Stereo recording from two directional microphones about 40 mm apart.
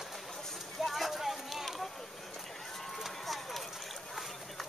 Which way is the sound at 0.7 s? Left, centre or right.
Centre.